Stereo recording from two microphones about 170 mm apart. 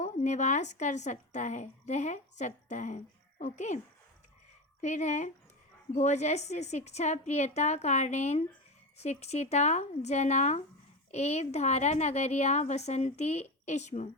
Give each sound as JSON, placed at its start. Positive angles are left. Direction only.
{"t": 0.0, "sound": "speech", "side_deg": 45}
{"t": 4.8, "sound": "a woman's voice", "side_deg": 45}